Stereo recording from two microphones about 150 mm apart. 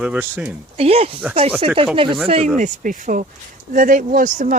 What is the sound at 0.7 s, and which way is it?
Speech, 40° right (ahead or behind).